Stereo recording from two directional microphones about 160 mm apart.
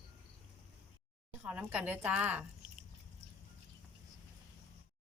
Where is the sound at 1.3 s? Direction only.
10° right (ahead or behind).